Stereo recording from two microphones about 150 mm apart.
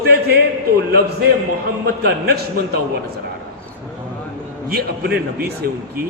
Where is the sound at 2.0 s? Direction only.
90° right.